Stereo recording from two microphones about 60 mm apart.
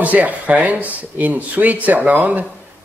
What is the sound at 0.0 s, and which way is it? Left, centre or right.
Speech, right.